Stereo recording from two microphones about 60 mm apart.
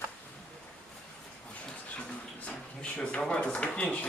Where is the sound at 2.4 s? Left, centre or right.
Centre.